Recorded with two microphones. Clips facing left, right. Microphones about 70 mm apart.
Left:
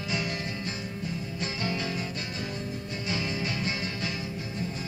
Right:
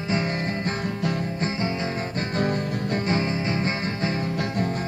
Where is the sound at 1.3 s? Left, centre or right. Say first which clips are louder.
Right 6 dB; right.